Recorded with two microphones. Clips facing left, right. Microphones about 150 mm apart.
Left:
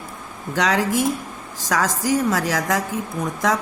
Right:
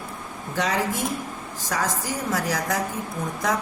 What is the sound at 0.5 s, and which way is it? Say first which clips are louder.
A woman's voice: left 5 dB; 90° left.